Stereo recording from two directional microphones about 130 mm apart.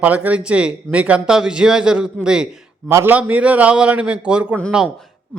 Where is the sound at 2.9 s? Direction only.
15° right (ahead or behind).